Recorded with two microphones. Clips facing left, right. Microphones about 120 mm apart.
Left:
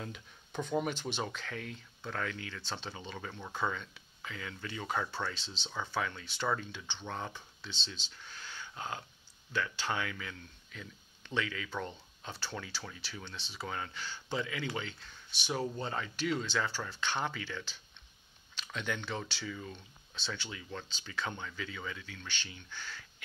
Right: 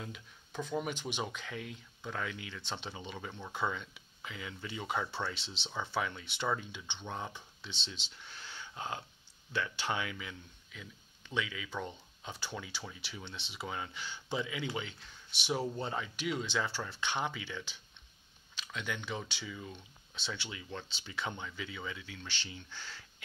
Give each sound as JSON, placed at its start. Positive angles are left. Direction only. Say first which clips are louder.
{"t": 0.0, "sound": "speech", "louder": "left 2 dB", "side_deg": -5}
{"t": 18.6, "sound": "speech", "louder": "left 2 dB", "side_deg": -5}